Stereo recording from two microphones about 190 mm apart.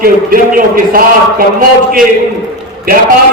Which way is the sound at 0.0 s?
50° right (ahead or behind).